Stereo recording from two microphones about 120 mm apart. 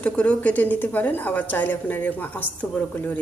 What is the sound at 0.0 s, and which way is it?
A woman's voice, 10° left (ahead or behind).